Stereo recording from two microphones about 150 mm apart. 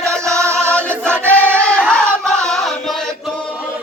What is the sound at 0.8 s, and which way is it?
Choir, 10° left (ahead or behind).